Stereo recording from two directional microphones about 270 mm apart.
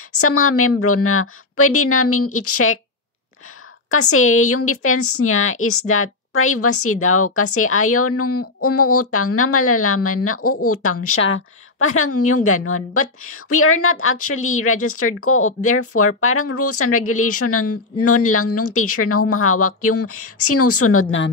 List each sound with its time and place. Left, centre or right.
0.1 s a woman's voice: left
3.9 s a woman's voice: left